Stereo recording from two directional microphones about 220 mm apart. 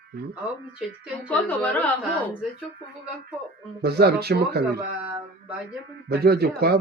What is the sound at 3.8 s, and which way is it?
Speech, 45° right (ahead or behind).